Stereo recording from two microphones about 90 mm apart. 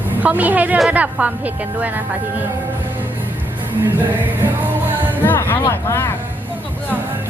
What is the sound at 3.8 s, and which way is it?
Music, 20° right (ahead or behind).